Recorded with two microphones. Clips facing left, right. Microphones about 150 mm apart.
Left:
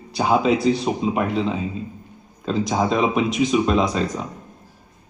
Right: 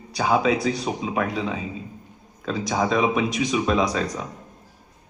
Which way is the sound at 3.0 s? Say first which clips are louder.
Left 2 dB; 25° left (ahead or behind).